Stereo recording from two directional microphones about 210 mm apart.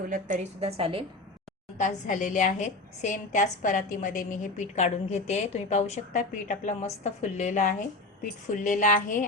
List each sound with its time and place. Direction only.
0.1 s a woman's voice: 35° right (ahead or behind)
1.8 s a woman's voice: 35° left (ahead or behind)